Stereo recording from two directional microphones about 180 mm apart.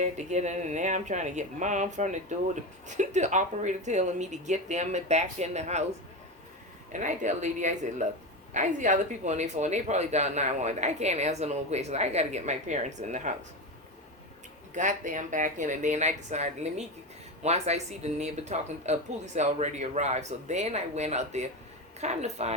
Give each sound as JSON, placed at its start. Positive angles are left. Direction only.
{"t": 0.0, "sound": "speech", "side_deg": -40}
{"t": 6.9, "sound": "speech", "side_deg": -45}
{"t": 14.8, "sound": "speech", "side_deg": -45}